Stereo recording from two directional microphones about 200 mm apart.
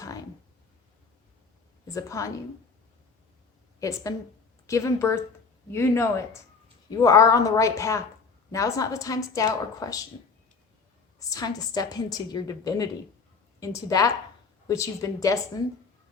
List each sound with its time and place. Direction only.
1.9 s speech: 15° left (ahead or behind)
3.8 s a woman's voice: 15° left (ahead or behind)
11.3 s a woman's voice: 20° left (ahead or behind)